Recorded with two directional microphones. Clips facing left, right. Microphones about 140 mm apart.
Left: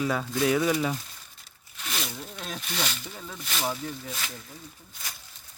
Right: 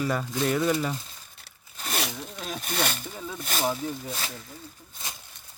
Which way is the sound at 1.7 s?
40° right (ahead or behind).